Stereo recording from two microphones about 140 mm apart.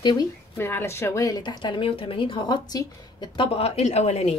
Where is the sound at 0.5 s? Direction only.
15° left (ahead or behind); by 4.3 s 50° left (ahead or behind).